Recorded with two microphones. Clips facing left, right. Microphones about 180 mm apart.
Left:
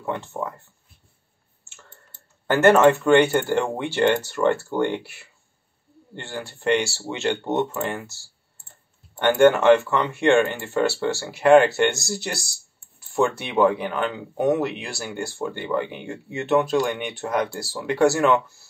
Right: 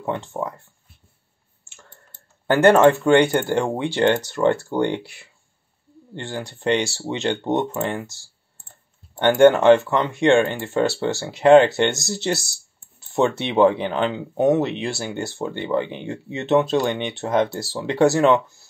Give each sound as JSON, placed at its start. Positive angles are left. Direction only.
{"t": 0.0, "sound": "speech", "side_deg": -20}
{"t": 1.6, "sound": "clicking", "side_deg": -15}
{"t": 2.4, "sound": "speech", "side_deg": -15}
{"t": 9.2, "sound": "speech", "side_deg": -20}